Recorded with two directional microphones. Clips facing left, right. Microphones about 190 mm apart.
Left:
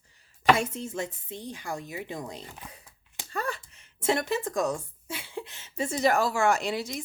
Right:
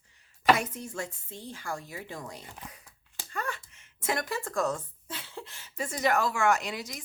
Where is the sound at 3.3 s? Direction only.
35° left (ahead or behind).